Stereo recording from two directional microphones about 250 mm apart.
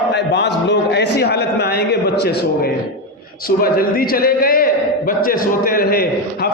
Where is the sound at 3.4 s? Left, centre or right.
Left.